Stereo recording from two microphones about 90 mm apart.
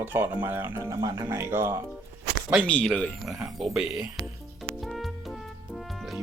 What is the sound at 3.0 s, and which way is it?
Speech, 5° right (ahead or behind).